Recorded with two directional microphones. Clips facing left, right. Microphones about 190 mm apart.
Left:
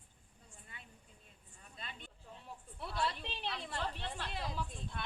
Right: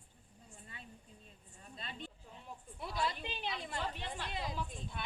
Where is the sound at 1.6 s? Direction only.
30° right (ahead or behind).